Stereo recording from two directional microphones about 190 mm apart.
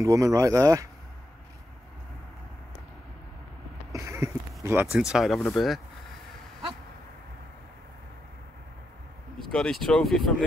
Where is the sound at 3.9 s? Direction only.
15° right (ahead or behind).